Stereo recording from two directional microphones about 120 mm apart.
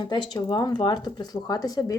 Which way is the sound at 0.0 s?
40° left (ahead or behind).